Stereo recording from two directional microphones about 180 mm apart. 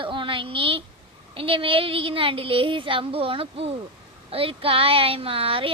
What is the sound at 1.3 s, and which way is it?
Speech, 30° right (ahead or behind).